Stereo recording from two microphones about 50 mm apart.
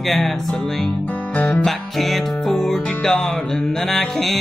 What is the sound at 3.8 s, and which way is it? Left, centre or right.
Music, centre.